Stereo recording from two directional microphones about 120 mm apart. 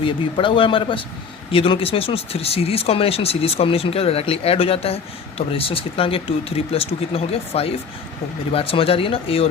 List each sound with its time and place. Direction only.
0.0 s speech: 45° left (ahead or behind)